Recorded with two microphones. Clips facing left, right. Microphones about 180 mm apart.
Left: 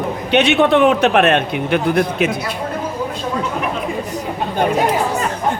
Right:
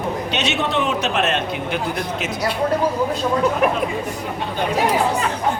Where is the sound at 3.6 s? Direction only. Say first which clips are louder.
Right 4 dB; 50° right (ahead or behind).